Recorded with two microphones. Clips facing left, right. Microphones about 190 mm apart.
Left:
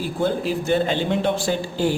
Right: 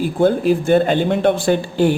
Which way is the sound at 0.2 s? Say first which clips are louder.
Right 8 dB; 50° right (ahead or behind).